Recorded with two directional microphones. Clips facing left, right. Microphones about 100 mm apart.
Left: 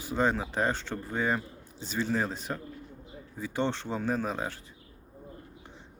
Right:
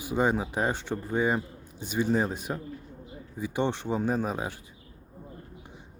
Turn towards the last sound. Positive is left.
turn(degrees=-10)  # may be behind; listen again after turning